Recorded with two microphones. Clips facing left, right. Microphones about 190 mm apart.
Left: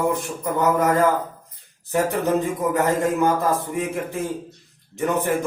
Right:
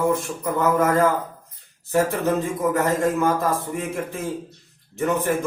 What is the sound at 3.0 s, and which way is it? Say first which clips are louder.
A man's voice: left 1 dB; 15° left (ahead or behind).